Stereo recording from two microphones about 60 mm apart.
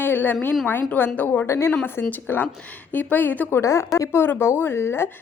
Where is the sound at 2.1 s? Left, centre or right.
Left.